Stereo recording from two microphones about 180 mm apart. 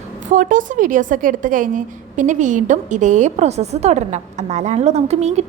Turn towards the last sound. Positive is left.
turn(degrees=-35)  # may be behind; listen again after turning